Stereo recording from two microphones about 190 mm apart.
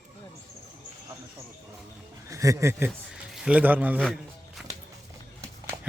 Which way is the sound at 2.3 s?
15° right (ahead or behind).